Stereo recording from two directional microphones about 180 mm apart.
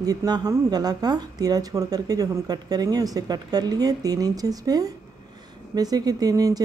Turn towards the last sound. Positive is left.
turn(degrees=-20)  # may be behind; listen again after turning